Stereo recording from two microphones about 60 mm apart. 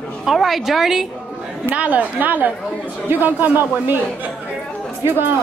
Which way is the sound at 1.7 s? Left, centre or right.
Right.